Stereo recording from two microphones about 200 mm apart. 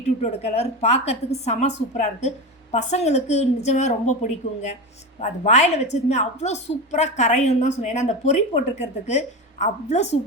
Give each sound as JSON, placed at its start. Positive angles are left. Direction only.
{"t": 0.0, "sound": "a woman's voice", "side_deg": 35}